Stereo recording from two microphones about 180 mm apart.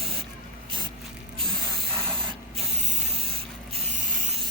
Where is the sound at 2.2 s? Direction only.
30° right (ahead or behind).